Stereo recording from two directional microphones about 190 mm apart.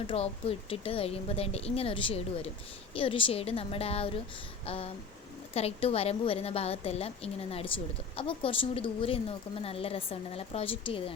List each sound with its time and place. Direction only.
0.1 s a woman's voice: 30° left (ahead or behind)